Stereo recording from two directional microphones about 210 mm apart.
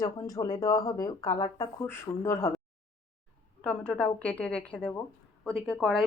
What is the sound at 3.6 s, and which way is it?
A woman's voice, 5° left (ahead or behind).